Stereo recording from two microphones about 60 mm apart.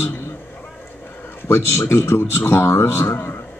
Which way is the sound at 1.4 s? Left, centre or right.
Left.